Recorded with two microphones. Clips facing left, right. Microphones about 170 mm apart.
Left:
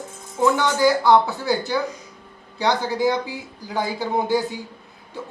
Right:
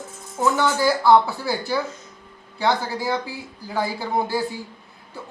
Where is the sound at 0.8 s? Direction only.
20° left (ahead or behind).